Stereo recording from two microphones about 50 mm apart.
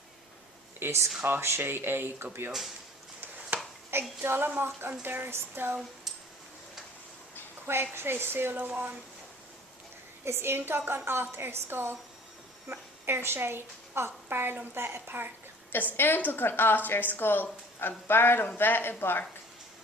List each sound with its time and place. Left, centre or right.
0.8 s a woman's voice: right
2.5 s speech: centre
3.5 s a sound: right
4.2 s a woman's voice: right
7.7 s a woman's voice: right
8.5 s speech: right
10.2 s a woman's voice: right
16.0 s speech: left